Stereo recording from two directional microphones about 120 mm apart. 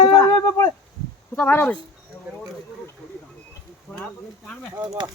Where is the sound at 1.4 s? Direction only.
15° left (ahead or behind).